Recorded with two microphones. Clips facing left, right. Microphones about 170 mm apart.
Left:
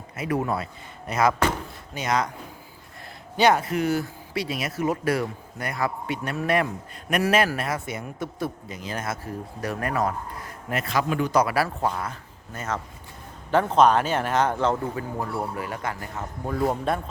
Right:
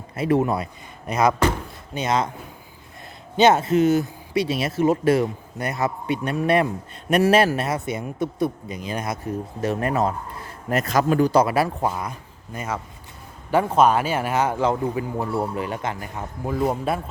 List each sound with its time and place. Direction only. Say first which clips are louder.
0.2 s a man's voice: right 5 dB; 25° right (ahead or behind)
3.3 s a man's voice: right 4 dB; 25° right (ahead or behind)
10.7 s a man's voice: right 5 dB; 40° right (ahead or behind); by 16.2 s 20° right (ahead or behind)
16.9 s speech: right 1 dB; 5° right (ahead or behind)